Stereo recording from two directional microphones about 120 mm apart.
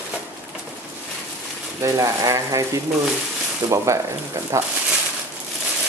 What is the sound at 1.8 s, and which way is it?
Speech, 30° right (ahead or behind).